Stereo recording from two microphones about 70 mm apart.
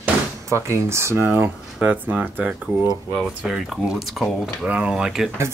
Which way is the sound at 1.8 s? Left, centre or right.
Centre.